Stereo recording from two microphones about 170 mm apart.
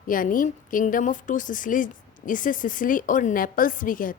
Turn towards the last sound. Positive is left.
turn(degrees=55)  # may be behind; listen again after turning